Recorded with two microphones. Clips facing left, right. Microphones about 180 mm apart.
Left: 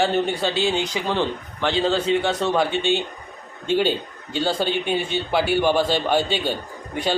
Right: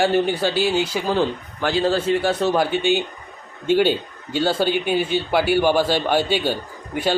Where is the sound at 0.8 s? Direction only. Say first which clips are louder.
Right 3 dB; 5° right (ahead or behind).